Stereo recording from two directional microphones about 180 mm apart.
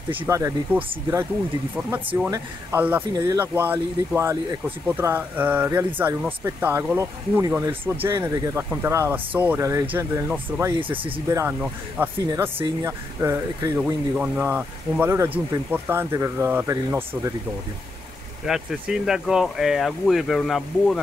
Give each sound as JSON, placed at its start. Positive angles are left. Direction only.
{"t": 0.2, "sound": "speech", "side_deg": -15}
{"t": 1.8, "sound": "speech", "side_deg": -5}
{"t": 18.4, "sound": "speech", "side_deg": 0}